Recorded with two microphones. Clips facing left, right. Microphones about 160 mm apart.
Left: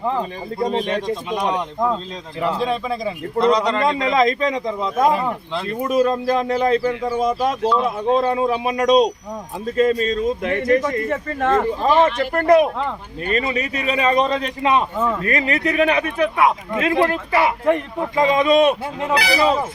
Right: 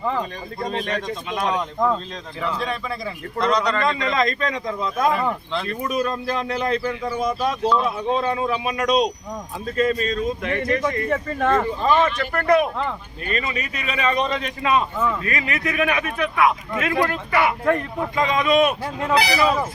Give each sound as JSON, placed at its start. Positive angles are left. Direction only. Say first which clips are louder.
{"t": 0.7, "sound": "speech", "louder": "left 2 dB", "side_deg": 25}
{"t": 8.3, "sound": "speech", "louder": "left 4 dB", "side_deg": 25}
{"t": 10.8, "sound": "speech", "louder": "left 1 dB", "side_deg": 0}
{"t": 11.8, "sound": "speech", "louder": "left 3 dB", "side_deg": 25}
{"t": 15.0, "sound": "speech", "louder": "left 4 dB", "side_deg": 40}